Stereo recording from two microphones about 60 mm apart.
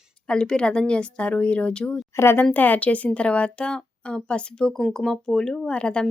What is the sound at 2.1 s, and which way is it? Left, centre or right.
Speech, left.